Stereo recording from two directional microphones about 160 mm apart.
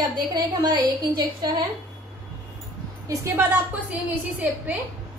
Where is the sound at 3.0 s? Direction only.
15° right (ahead or behind).